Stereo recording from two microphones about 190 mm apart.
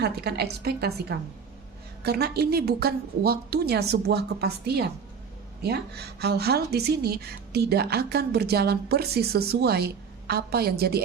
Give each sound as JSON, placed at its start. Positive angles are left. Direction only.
{"t": 0.0, "sound": "a woman's voice", "side_deg": -60}
{"t": 2.0, "sound": "a woman's voice", "side_deg": -60}